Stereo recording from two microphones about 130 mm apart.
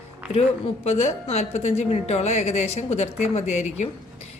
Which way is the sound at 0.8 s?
55° left (ahead or behind).